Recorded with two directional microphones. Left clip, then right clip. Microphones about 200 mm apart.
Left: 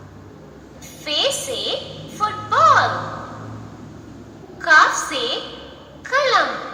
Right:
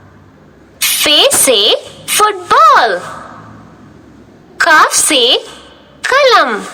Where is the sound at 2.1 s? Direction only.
60° right (ahead or behind).